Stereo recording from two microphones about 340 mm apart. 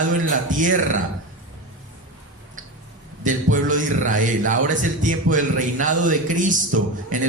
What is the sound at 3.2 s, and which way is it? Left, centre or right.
A man's voice, right.